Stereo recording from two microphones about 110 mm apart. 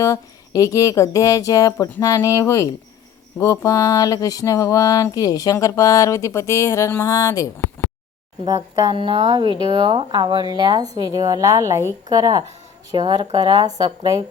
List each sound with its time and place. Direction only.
0.0 s speech: 30° left (ahead or behind)
8.4 s speech: 35° right (ahead or behind)
9.0 s speech: 50° right (ahead or behind)